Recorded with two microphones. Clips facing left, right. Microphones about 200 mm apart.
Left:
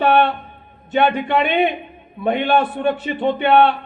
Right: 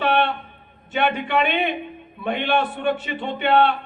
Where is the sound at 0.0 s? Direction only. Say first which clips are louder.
Left 5 dB; 45° left (ahead or behind).